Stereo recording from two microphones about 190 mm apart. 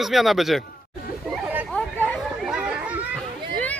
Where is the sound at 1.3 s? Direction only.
5° right (ahead or behind).